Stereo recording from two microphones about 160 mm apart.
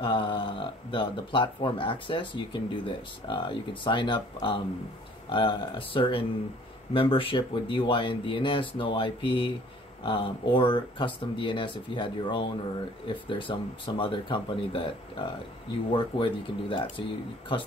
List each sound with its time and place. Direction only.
0.0 s speech: 30° left (ahead or behind)